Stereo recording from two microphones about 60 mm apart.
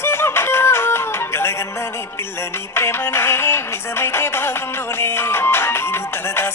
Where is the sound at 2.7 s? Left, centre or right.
Left.